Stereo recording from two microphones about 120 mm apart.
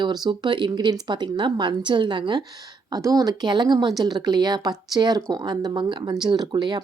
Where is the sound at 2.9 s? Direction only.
30° right (ahead or behind).